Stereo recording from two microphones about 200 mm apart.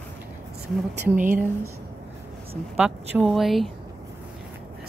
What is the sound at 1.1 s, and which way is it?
Speech, 40° right (ahead or behind).